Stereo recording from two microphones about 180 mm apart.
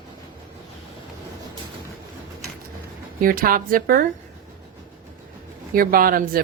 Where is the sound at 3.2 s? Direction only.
50° right (ahead or behind).